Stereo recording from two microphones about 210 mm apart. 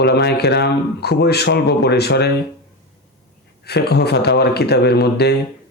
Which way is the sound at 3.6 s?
50° left (ahead or behind).